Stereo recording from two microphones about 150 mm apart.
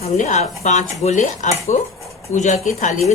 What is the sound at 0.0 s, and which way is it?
Speech, 55° left (ahead or behind).